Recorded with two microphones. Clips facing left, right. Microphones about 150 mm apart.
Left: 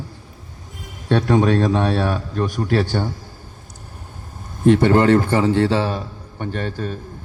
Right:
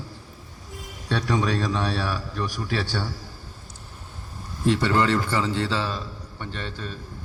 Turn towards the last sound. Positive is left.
turn(degrees=50)  # may be behind; listen again after turning